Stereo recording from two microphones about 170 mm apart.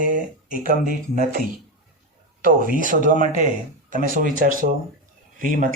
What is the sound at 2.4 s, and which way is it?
Speech, 50° right (ahead or behind).